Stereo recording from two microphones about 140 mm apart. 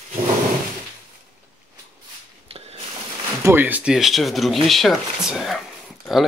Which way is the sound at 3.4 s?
15° right (ahead or behind).